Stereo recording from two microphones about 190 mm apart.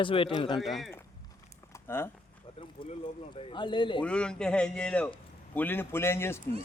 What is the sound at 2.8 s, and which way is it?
Speech, 25° left (ahead or behind).